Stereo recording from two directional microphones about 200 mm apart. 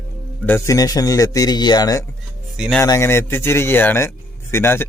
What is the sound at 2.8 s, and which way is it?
A man's voice, 15° left (ahead or behind).